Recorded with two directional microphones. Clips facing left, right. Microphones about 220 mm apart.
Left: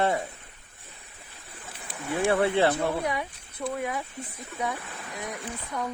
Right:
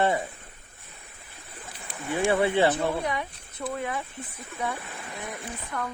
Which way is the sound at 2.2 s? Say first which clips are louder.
Even; 5° right (ahead or behind).